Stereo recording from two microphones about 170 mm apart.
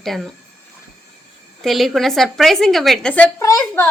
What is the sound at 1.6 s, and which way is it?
Speech, centre (ahead or behind).